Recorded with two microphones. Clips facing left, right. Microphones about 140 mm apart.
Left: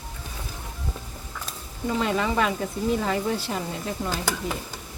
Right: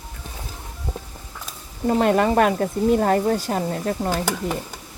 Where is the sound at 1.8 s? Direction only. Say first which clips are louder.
Right 7 dB; 50° right (ahead or behind).